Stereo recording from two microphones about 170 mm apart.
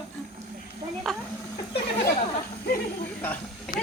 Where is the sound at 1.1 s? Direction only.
Centre (ahead or behind).